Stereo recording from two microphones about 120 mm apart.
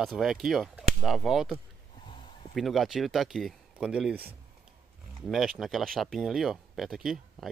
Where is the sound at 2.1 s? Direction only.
45° left (ahead or behind).